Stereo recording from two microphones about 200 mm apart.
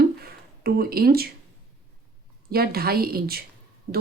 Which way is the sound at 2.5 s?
50° right (ahead or behind).